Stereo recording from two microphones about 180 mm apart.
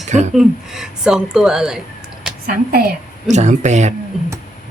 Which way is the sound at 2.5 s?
60° right (ahead or behind).